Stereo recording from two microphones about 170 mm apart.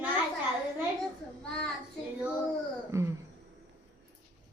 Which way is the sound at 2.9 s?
15° right (ahead or behind).